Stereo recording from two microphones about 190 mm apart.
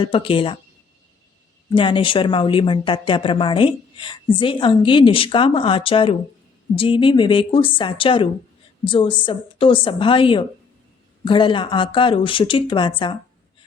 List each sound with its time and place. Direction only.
0.0 s speech: 30° left (ahead or behind)
1.7 s speech: 25° left (ahead or behind)